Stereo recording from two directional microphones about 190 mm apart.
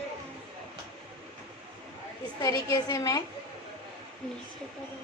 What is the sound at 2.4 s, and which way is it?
Speech, 20° left (ahead or behind).